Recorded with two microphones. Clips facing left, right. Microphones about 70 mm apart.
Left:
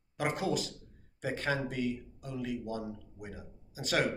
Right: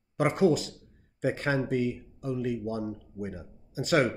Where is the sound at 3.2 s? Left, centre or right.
Right.